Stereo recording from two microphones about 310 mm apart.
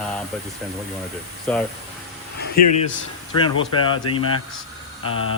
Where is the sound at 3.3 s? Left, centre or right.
Centre.